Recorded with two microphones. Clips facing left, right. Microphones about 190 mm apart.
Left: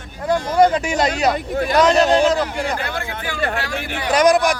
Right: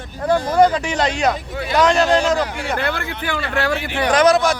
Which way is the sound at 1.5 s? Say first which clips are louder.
Left 3 dB; 45° left (ahead or behind).